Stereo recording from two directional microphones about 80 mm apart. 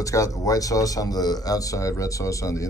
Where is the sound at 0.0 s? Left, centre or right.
Left.